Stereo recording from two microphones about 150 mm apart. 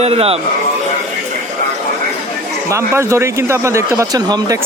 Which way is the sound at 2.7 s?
20° right (ahead or behind).